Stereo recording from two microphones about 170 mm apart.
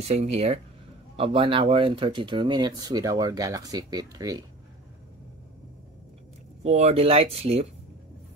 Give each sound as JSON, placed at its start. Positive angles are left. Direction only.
{"t": 0.2, "sound": "speech", "side_deg": -40}
{"t": 6.6, "sound": "speech", "side_deg": -40}